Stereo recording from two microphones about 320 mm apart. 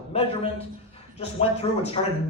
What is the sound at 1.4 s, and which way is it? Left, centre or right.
Speech, centre.